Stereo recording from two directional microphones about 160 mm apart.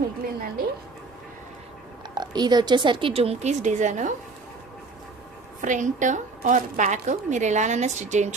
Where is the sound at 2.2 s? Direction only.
25° right (ahead or behind); by 4.1 s 50° right (ahead or behind).